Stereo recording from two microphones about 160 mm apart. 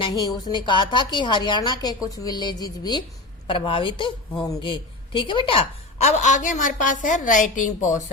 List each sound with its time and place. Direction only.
0.0 s a woman's voice: 25° left (ahead or behind); by 8.0 s 50° left (ahead or behind)